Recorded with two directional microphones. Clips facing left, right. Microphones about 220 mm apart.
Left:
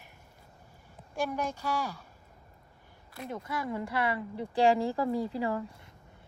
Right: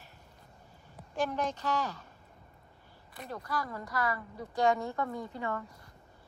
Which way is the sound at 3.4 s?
25° left (ahead or behind).